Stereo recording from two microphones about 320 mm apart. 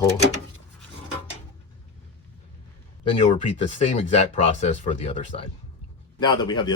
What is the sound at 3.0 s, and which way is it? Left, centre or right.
Speech, centre.